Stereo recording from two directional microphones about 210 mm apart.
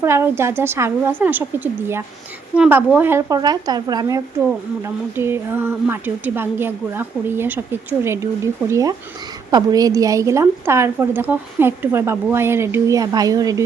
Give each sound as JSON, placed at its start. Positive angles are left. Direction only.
{"t": 0.0, "sound": "a woman's voice", "side_deg": -10}